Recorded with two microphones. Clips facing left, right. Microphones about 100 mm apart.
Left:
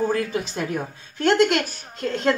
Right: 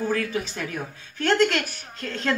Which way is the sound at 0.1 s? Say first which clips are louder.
Left 2 dB; 25° left (ahead or behind).